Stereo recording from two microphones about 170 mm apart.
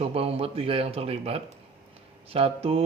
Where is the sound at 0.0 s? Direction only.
35° right (ahead or behind).